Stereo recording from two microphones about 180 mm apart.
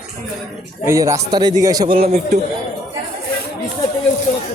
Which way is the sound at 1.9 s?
50° right (ahead or behind).